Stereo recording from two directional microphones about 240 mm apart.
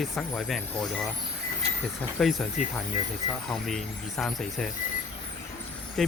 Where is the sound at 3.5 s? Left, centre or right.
Centre.